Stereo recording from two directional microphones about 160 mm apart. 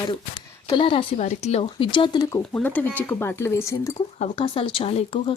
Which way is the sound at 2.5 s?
10° left (ahead or behind).